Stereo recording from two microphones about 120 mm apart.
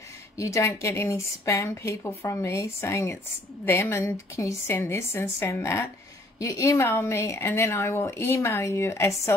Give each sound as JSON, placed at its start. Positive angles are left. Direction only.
{"t": 0.4, "sound": "a woman's voice", "side_deg": 25}